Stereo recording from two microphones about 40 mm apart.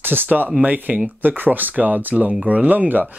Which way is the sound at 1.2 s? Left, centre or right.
Right.